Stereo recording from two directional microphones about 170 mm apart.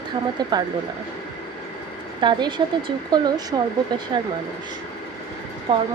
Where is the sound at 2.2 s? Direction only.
30° right (ahead or behind).